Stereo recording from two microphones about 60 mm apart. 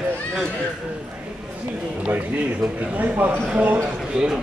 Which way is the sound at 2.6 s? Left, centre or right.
Centre.